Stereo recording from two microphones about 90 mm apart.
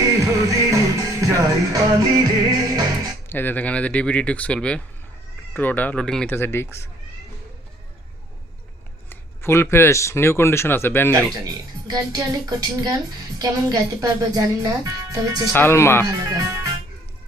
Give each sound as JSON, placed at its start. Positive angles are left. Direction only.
{"t": 0.0, "sound": "music", "side_deg": -35}
{"t": 3.2, "sound": "speech", "side_deg": 20}
{"t": 9.0, "sound": "speech", "side_deg": 30}
{"t": 11.1, "sound": "speech", "side_deg": -45}
{"t": 15.5, "sound": "speech", "side_deg": 25}
{"t": 16.0, "sound": "speech", "side_deg": -40}